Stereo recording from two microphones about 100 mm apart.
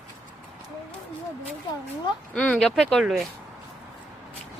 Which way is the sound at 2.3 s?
10° left (ahead or behind).